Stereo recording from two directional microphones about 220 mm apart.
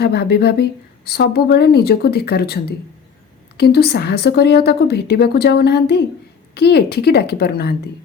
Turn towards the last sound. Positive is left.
turn(degrees=45)  # may be behind; listen again after turning